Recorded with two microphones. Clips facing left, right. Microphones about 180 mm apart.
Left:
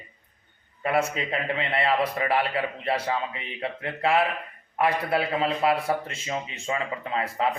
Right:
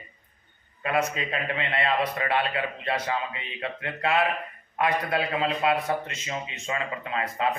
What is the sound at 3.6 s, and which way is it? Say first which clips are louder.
A man's voice: left 2 dB; 30° left (ahead or behind).